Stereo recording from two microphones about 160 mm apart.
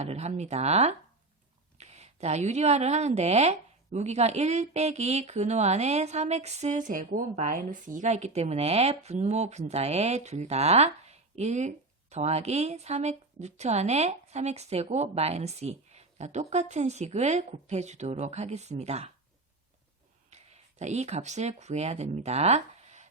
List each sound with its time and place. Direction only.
0.0 s speech: 45° right (ahead or behind)
20.3 s speech: 45° right (ahead or behind)